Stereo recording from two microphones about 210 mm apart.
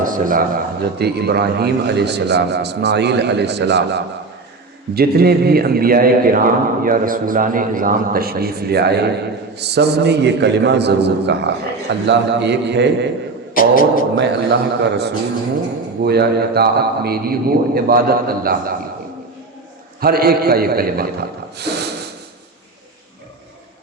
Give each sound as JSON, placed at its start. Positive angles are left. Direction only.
{"t": 0.0, "sound": "a man's voice", "side_deg": -40}
{"t": 13.5, "sound": "speech", "side_deg": 40}
{"t": 14.2, "sound": "a man's voice", "side_deg": -55}
{"t": 20.0, "sound": "a man's voice", "side_deg": -45}